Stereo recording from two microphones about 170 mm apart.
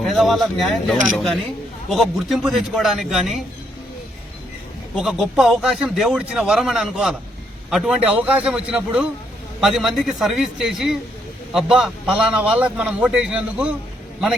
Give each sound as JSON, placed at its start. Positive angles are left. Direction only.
{"t": 0.0, "sound": "a man's voice", "side_deg": 0}
{"t": 4.9, "sound": "a man's voice", "side_deg": 0}